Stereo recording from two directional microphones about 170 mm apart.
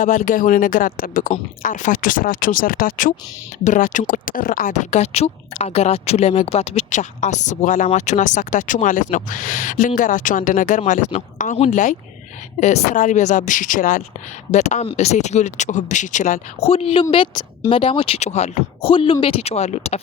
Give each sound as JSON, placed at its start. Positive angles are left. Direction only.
{"t": 0.0, "sound": "speech", "side_deg": 50}